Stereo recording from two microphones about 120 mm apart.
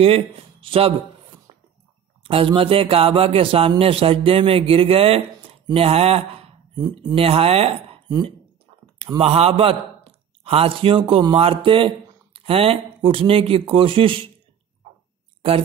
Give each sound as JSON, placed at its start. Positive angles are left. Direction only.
{"t": 0.0, "sound": "speech", "side_deg": -55}
{"t": 1.5, "sound": "a sound", "side_deg": -55}
{"t": 2.2, "sound": "a man's voice", "side_deg": -50}
{"t": 6.8, "sound": "speech", "side_deg": -35}
{"t": 7.2, "sound": "speech", "side_deg": -55}
{"t": 9.2, "sound": "a man's voice", "side_deg": -55}